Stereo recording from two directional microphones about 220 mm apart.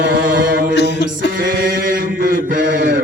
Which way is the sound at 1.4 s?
40° right (ahead or behind).